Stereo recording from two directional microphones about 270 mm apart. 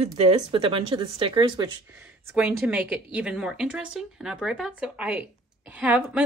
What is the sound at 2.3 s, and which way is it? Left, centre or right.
A woman's voice, centre.